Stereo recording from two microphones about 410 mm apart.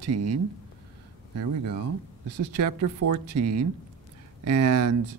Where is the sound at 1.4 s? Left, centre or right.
Right.